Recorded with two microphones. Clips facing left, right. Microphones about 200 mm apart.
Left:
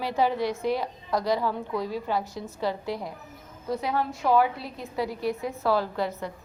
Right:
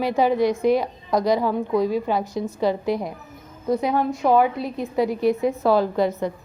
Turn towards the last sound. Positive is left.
turn(degrees=-20)  # may be behind; listen again after turning